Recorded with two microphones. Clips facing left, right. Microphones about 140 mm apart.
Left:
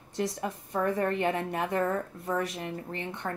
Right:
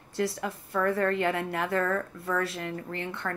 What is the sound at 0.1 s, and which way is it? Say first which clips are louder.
A woman's voice: right 1 dB; 20° left (ahead or behind).